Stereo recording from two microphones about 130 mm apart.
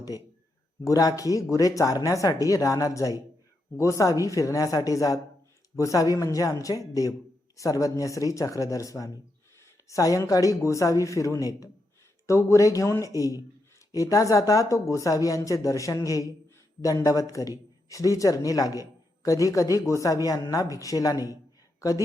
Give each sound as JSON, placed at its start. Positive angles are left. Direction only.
{"t": 0.9, "sound": "a man's voice", "side_deg": 25}